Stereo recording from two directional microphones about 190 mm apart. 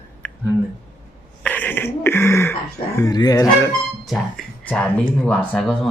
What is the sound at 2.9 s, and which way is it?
Speech, 20° left (ahead or behind).